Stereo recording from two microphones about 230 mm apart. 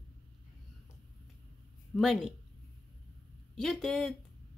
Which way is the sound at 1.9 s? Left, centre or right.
Centre.